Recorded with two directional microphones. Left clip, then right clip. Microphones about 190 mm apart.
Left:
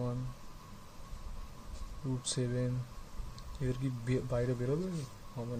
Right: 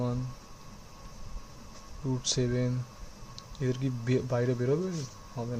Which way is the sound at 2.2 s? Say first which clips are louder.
Right 7 dB; 20° right (ahead or behind).